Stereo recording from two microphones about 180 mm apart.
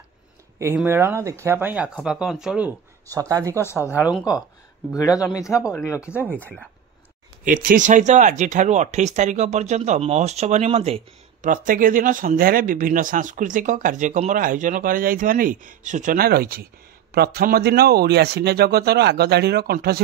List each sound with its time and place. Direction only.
0.8 s speech: 15° right (ahead or behind)
3.1 s speech: 20° right (ahead or behind)
4.0 s speech: 5° right (ahead or behind)
4.9 s speech: 20° left (ahead or behind)
6.0 s speech: 10° right (ahead or behind)
6.3 s speech: 5° left (ahead or behind)
7.4 s speech: 50° right (ahead or behind)
11.4 s speech: 45° right (ahead or behind)